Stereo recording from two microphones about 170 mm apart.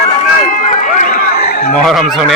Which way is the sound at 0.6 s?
45° left (ahead or behind).